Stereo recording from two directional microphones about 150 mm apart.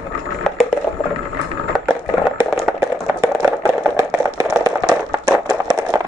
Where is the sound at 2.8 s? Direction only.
20° right (ahead or behind).